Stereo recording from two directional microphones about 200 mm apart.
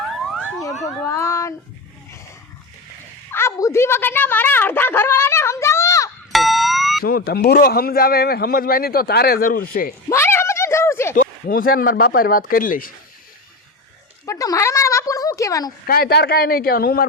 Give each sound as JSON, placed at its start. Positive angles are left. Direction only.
{"t": 0.0, "sound": "police car", "side_deg": 0}
{"t": 0.7, "sound": "a sound", "side_deg": 0}
{"t": 1.0, "sound": "speech", "side_deg": 15}
{"t": 3.3, "sound": "a woman's voice", "side_deg": 15}
{"t": 6.3, "sound": "music", "side_deg": 0}
{"t": 7.0, "sound": "a man's voice", "side_deg": 50}
{"t": 10.1, "sound": "a sound", "side_deg": 10}
{"t": 11.1, "sound": "a man's voice", "side_deg": 45}
{"t": 14.3, "sound": "a sound", "side_deg": 15}
{"t": 15.9, "sound": "a man's voice", "side_deg": 50}